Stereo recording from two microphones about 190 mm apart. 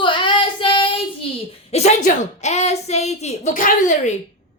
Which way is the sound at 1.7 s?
35° left (ahead or behind).